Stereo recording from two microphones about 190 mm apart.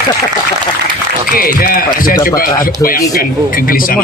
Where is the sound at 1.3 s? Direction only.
50° left (ahead or behind).